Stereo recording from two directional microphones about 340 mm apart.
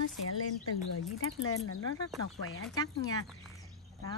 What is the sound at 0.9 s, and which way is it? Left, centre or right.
Speech, left.